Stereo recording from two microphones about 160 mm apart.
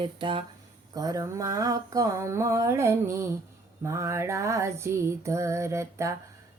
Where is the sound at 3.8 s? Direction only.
20° right (ahead or behind).